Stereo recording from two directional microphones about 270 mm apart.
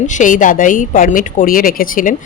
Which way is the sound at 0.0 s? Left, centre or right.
Left.